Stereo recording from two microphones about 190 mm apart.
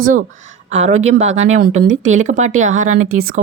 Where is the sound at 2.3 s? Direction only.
40° right (ahead or behind).